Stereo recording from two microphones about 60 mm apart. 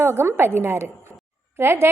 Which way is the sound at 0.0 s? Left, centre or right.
Right.